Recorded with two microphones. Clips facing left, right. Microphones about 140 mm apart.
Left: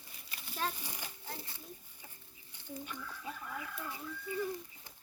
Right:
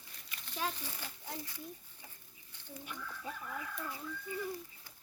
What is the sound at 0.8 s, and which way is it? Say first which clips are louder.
Speech: even; 15° left (ahead or behind).